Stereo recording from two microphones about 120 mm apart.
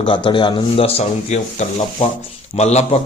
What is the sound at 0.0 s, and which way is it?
A man's voice, 45° left (ahead or behind).